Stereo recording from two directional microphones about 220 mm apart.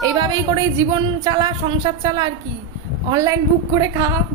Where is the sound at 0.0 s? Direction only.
15° right (ahead or behind).